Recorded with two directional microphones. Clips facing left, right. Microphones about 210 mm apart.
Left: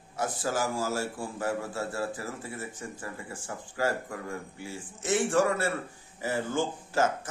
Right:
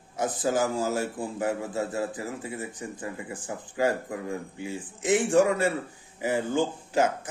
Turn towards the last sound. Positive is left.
turn(degrees=-15)  # may be behind; listen again after turning